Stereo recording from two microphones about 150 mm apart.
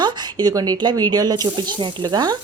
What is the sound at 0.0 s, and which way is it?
Speech, 30° right (ahead or behind).